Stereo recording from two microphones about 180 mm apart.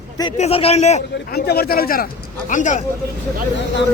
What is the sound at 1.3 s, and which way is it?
Speech, 60° left (ahead or behind).